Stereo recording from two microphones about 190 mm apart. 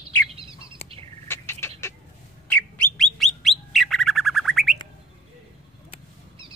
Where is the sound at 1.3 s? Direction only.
10° left (ahead or behind).